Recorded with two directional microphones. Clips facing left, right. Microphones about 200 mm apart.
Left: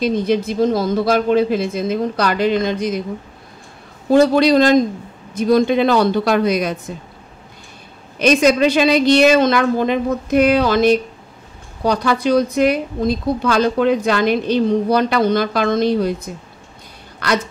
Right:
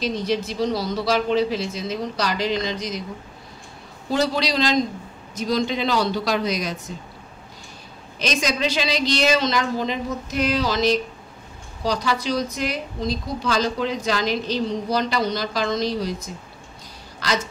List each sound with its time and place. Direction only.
0.0 s a man's voice: 55° left (ahead or behind)
4.1 s a man's voice: 55° left (ahead or behind)
8.2 s a woman's voice: 55° left (ahead or behind)